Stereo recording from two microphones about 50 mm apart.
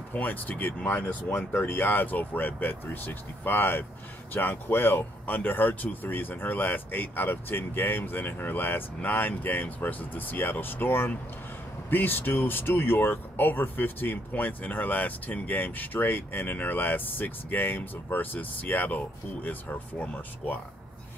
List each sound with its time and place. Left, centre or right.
0.1 s a man's voice: left
5.2 s speech: left